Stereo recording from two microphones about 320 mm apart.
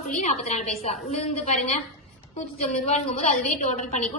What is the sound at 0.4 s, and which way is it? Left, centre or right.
A woman's voice, centre.